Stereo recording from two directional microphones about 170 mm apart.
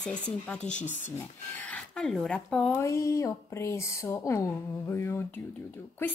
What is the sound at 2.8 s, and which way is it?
Speech, 15° left (ahead or behind).